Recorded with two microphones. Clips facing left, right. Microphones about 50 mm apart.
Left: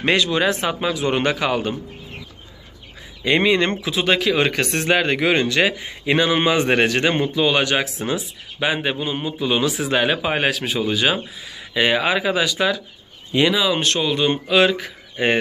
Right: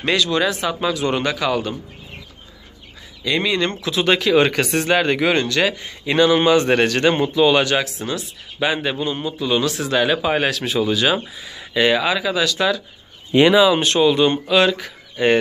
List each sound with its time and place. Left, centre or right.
0.0 s speech: left
0.7 s speech: centre
3.3 s speech: left
3.8 s speech: centre
7.8 s speech: left
11.4 s a sound: centre
11.8 s speech: centre
12.4 s speech: centre
13.3 s speech: right
13.7 s speech: centre
14.3 s speech: centre